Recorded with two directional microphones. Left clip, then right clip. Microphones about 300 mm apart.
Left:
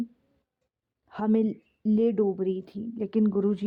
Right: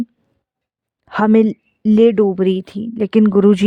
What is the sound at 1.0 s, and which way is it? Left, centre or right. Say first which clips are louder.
Speech: right 13 dB; right.